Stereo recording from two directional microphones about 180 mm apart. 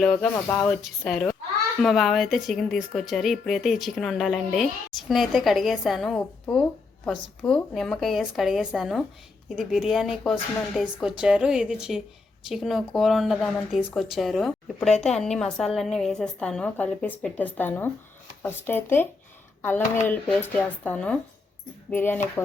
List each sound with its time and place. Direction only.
0.0 s a woman's voice: centre (ahead or behind)
20.1 s a woman's voice: 10° left (ahead or behind)